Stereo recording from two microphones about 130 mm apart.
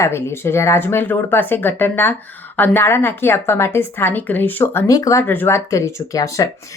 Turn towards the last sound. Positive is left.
turn(degrees=25)  # may be behind; listen again after turning